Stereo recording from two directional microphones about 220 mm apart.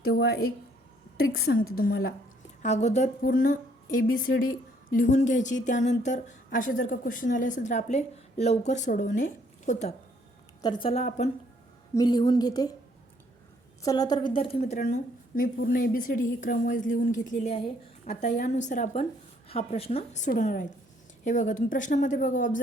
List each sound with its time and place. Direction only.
0.0 s a woman's voice: 45° left (ahead or behind)
2.6 s speech: 30° left (ahead or behind)
10.6 s a woman's voice: 20° left (ahead or behind)
11.9 s a woman's voice: 15° left (ahead or behind)
13.8 s a woman's voice: 15° left (ahead or behind); by 22.6 s 35° left (ahead or behind)